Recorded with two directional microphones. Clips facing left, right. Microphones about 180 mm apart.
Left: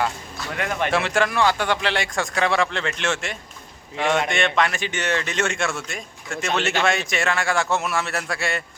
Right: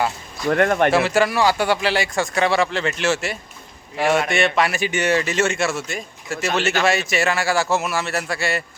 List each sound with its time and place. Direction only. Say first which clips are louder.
0.5 s speech: right 8 dB; 55° right (ahead or behind)
0.9 s a man's voice: right 4 dB; 5° right (ahead or behind)